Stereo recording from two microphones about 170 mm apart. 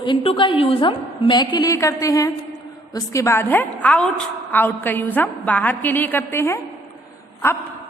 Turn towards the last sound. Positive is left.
turn(degrees=15)  # may be behind; listen again after turning